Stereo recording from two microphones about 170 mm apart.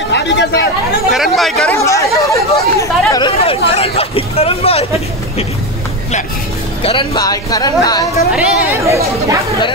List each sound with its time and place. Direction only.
0.1 s speech: 90° left
1.1 s speech: centre (ahead or behind)
1.7 s speech: 20° left (ahead or behind); by 4.8 s 35° left (ahead or behind)
6.8 s speech: 30° left (ahead or behind)
8.3 s speech: 5° right (ahead or behind)
8.8 s speech: 15° right (ahead or behind)